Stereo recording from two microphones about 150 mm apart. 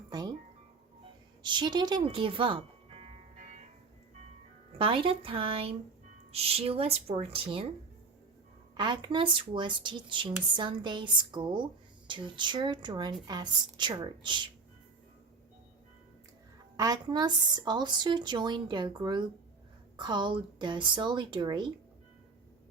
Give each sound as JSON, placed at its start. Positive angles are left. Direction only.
{"t": 0.1, "sound": "music", "side_deg": -25}
{"t": 1.4, "sound": "speech", "side_deg": -30}
{"t": 4.8, "sound": "speech", "side_deg": -35}
{"t": 8.7, "sound": "speech", "side_deg": -30}
{"t": 16.7, "sound": "speech", "side_deg": -25}